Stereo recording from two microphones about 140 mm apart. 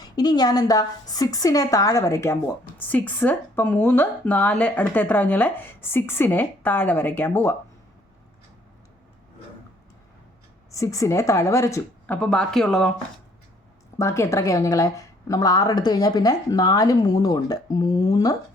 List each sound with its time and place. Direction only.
0.0 s speech: 30° left (ahead or behind)
10.7 s speech: 25° left (ahead or behind)
12.1 s speech: 5° left (ahead or behind)
14.0 s speech: 20° left (ahead or behind)